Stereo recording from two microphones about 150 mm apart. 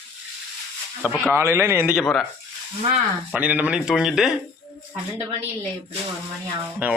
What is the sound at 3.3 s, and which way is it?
Speech, 10° right (ahead or behind).